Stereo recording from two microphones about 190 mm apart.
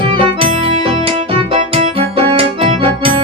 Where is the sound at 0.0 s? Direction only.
30° right (ahead or behind).